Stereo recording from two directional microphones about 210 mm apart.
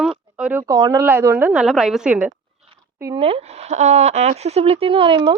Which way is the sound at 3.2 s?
30° right (ahead or behind).